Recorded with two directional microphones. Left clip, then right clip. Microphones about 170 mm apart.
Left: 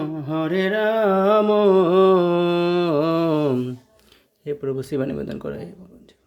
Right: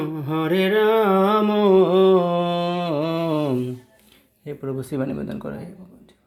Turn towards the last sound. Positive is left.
turn(degrees=30)  # may be behind; listen again after turning